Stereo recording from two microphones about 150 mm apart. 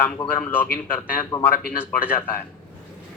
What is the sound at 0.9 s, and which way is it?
Speech, 25° left (ahead or behind).